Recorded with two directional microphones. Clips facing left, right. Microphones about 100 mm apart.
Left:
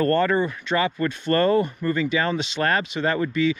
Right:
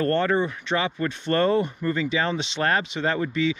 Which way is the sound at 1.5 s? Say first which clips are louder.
Left 2 dB; 45° left (ahead or behind).